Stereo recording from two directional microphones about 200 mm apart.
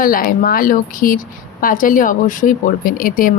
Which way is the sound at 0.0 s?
45° left (ahead or behind).